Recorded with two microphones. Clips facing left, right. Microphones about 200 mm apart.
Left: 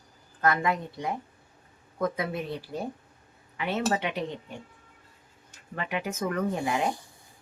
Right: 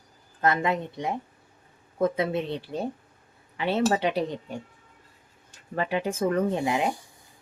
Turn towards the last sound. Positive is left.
turn(degrees=-20)  # may be behind; listen again after turning